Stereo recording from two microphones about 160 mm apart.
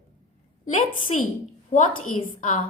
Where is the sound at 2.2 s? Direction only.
55° left (ahead or behind).